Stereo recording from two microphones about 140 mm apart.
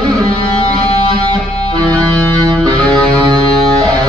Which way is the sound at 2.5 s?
30° right (ahead or behind).